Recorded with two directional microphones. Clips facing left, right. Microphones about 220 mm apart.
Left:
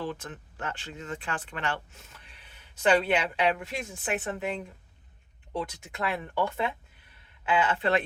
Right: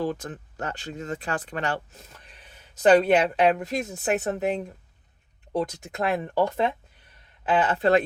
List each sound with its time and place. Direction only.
0.0 s speech: 40° right (ahead or behind)